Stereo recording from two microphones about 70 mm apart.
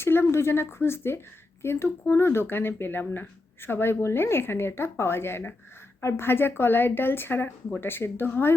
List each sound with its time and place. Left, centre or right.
0.0 s speech: left